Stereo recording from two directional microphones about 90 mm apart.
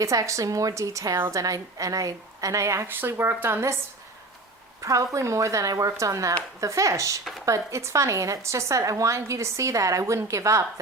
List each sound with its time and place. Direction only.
0.0 s a woman's voice: 35° right (ahead or behind)
4.8 s a woman's voice: 35° right (ahead or behind)